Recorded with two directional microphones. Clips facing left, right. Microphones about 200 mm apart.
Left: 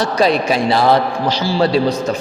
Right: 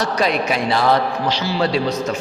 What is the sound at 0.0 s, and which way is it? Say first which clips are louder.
A man's voice: left 4 dB; 30° left (ahead or behind).